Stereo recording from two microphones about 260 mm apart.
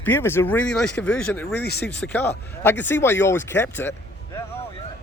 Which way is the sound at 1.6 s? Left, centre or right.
Left.